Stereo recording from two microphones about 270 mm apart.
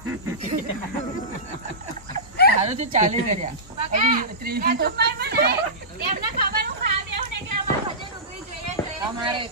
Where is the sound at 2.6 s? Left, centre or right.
Right.